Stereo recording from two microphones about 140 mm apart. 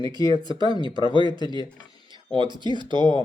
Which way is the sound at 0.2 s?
35° right (ahead or behind).